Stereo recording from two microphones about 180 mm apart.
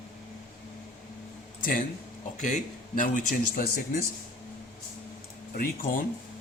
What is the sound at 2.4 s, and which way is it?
Speech, 45° left (ahead or behind).